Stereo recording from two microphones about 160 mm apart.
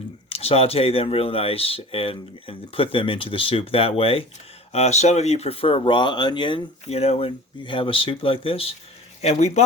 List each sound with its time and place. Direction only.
0.3 s speech: 40° left (ahead or behind)
6.8 s speech: 40° left (ahead or behind)